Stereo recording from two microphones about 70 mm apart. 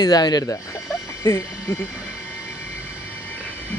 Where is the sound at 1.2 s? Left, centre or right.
Left.